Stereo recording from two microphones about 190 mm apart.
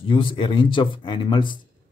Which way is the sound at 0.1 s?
25° left (ahead or behind).